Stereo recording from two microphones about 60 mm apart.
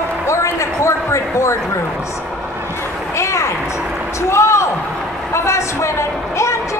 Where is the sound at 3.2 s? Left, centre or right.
Left.